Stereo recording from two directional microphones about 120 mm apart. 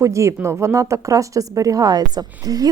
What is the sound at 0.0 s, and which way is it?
Speech, 25° right (ahead or behind).